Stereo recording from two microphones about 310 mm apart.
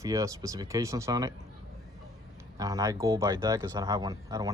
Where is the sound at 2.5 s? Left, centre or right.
Centre.